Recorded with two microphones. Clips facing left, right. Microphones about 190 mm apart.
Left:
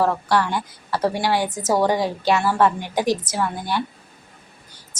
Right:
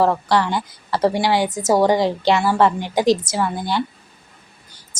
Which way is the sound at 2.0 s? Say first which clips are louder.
Right 4 dB; 80° right.